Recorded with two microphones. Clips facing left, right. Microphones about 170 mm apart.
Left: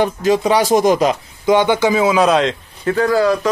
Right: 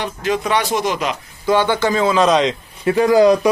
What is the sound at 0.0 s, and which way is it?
Speech, 35° left (ahead or behind).